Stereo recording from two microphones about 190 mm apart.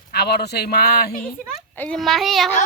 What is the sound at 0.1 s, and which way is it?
Speech, 60° left (ahead or behind).